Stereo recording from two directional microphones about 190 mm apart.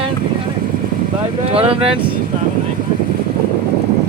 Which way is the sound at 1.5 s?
30° right (ahead or behind).